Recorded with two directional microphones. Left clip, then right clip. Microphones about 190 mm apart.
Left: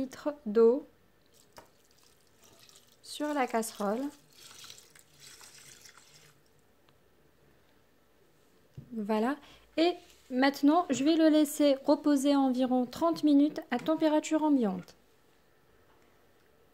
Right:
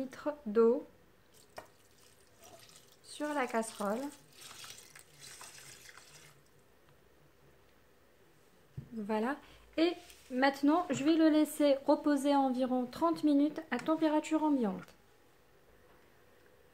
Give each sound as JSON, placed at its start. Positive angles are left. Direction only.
{"t": 0.0, "sound": "speech", "side_deg": 50}
{"t": 3.0, "sound": "a sound", "side_deg": 50}
{"t": 3.5, "sound": "speech", "side_deg": 50}
{"t": 9.0, "sound": "speech", "side_deg": 50}